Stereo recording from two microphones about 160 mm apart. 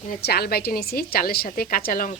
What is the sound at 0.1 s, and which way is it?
A woman's voice, 80° left.